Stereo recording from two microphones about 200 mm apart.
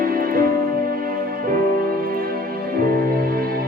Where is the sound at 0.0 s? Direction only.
45° right (ahead or behind).